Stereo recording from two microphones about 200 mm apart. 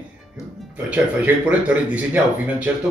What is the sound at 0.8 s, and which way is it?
Speech, 5° right (ahead or behind).